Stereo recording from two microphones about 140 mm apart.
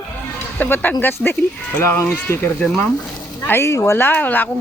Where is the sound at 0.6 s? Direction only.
10° left (ahead or behind).